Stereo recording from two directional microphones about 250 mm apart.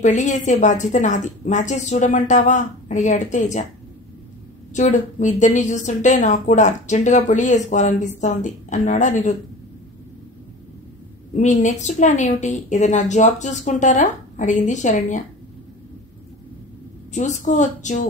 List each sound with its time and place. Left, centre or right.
0.0 s a woman's voice: left
4.7 s a woman's voice: left
11.3 s a woman's voice: left
17.1 s a woman's voice: left